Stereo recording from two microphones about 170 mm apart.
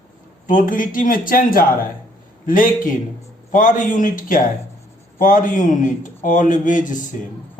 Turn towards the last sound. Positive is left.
turn(degrees=50)  # may be behind; listen again after turning